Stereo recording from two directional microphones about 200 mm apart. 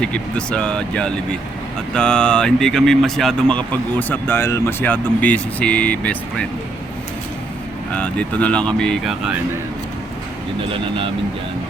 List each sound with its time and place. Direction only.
0.0 s speech: 5° left (ahead or behind)
7.9 s speech: 5° left (ahead or behind)
10.6 s speech: 25° right (ahead or behind)